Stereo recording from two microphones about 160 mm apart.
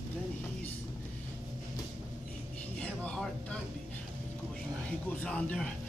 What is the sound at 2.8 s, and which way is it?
Speech, 5° left (ahead or behind).